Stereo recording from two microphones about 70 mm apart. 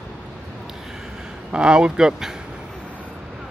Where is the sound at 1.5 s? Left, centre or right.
Centre.